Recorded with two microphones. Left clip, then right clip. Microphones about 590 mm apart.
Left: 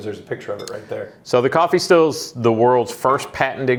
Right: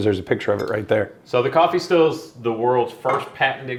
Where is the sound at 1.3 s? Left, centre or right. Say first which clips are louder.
Left 2 dB; left.